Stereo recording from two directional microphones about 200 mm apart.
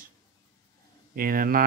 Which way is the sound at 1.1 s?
45° right (ahead or behind).